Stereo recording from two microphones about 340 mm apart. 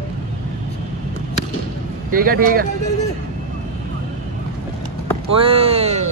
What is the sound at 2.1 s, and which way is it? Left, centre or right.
Speech, right.